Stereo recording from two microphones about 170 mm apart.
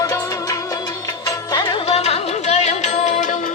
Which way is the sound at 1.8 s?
40° left (ahead or behind).